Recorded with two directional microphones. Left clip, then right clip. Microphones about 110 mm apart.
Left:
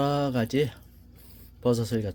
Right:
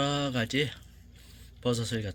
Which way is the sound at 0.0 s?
55° left (ahead or behind).